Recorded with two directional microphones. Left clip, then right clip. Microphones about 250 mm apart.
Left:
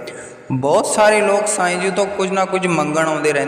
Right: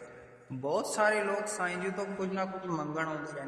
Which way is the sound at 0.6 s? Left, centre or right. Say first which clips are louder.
Left 16 dB; left.